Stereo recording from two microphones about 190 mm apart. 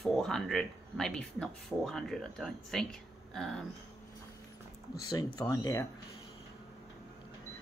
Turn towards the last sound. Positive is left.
turn(degrees=15)  # may be behind; listen again after turning